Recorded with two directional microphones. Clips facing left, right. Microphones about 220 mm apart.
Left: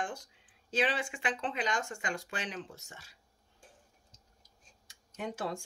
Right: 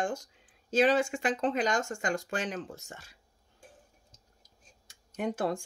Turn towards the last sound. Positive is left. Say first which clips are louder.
# right 6 dB
turn(degrees=-55)  # may be behind; listen again after turning